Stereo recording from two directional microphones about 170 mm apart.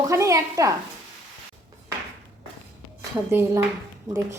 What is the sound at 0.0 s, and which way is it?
Speech, 20° right (ahead or behind).